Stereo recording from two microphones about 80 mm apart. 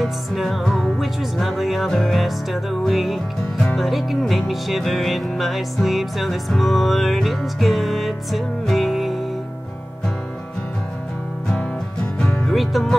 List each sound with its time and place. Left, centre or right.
0.0 s music: centre
11.4 s music: centre
12.5 s music: centre